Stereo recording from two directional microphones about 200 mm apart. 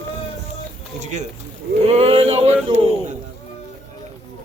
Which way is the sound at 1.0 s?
35° right (ahead or behind).